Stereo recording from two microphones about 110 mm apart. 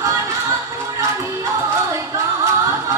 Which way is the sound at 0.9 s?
25° right (ahead or behind).